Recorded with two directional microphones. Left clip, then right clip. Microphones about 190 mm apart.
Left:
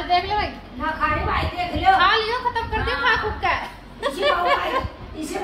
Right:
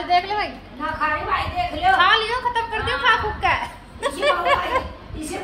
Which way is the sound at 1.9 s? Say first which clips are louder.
Right 1 dB; 35° right (ahead or behind).